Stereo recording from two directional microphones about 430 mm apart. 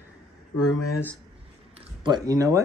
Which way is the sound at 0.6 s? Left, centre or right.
Left.